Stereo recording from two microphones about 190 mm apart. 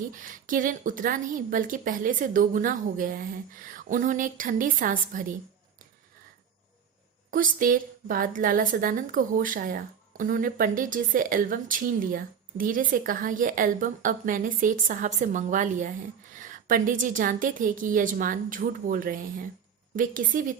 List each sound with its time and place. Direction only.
0.1 s a woman's voice: 45° right (ahead or behind)
7.3 s a woman's voice: 45° right (ahead or behind)